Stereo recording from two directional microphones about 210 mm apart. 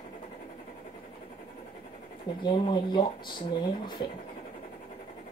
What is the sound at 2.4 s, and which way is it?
Speech, 20° left (ahead or behind).